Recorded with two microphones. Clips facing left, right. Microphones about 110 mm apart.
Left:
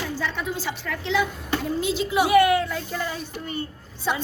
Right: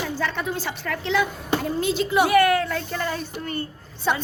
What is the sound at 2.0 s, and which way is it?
Speech, 55° right (ahead or behind).